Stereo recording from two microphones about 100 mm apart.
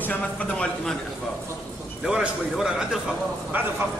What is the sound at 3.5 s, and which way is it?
Speech, 20° right (ahead or behind).